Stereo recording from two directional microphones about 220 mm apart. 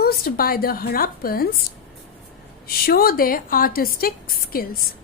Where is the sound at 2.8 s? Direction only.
40° left (ahead or behind).